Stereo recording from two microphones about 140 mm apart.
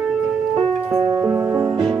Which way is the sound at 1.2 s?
15° right (ahead or behind).